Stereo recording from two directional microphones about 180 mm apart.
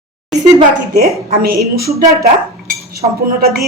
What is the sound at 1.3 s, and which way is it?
Speech, 55° right (ahead or behind).